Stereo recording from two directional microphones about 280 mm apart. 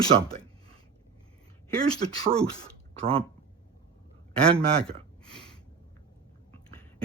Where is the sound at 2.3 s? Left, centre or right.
Centre.